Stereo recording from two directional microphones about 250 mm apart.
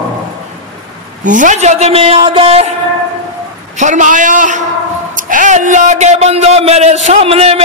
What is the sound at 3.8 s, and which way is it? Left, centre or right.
Speech, right.